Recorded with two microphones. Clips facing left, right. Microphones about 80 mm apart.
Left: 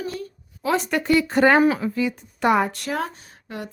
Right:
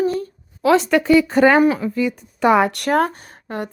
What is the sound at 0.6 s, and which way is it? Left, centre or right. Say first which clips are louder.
Speech: right 8 dB; right.